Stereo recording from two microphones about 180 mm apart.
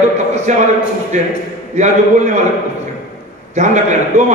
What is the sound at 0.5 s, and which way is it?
A man's voice, 40° right (ahead or behind).